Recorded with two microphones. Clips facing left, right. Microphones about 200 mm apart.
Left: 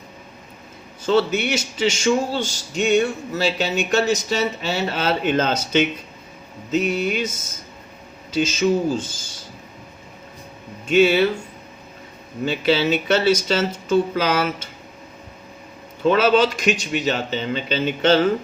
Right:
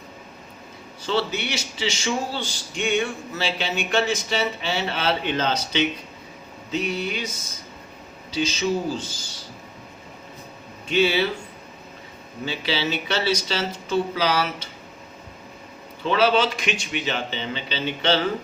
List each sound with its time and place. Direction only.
1.0 s a man's voice: 50° left (ahead or behind)
8.3 s a man's voice: 50° left (ahead or behind)
10.8 s a man's voice: 50° left (ahead or behind)
12.5 s a man's voice: 50° left (ahead or behind)
16.0 s a man's voice: 45° left (ahead or behind)